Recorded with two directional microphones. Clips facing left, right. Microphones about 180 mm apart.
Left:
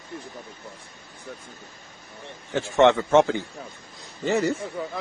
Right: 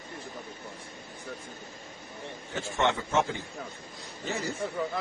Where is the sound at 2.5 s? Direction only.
85° left.